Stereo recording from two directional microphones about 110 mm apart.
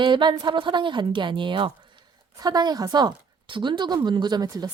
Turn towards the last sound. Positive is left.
turn(degrees=-35)  # may be behind; listen again after turning